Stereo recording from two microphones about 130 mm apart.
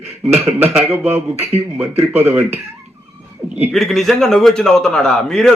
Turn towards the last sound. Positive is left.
turn(degrees=5)  # may be behind; listen again after turning